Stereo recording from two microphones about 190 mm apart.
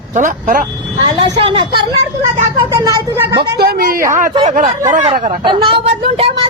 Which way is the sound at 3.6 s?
50° right (ahead or behind).